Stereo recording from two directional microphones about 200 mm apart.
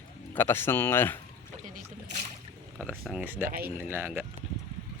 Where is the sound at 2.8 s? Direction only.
5° right (ahead or behind).